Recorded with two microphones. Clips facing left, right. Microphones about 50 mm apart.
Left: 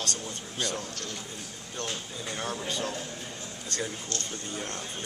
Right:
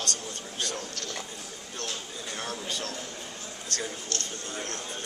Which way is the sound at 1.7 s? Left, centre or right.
Centre.